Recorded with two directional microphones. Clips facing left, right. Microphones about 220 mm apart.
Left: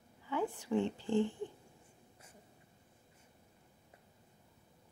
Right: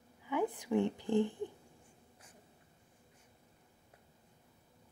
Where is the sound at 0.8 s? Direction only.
15° right (ahead or behind).